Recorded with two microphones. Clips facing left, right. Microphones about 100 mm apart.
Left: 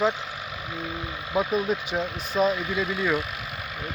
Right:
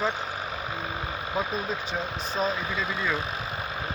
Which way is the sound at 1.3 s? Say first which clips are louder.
Left 6 dB; 15° left (ahead or behind).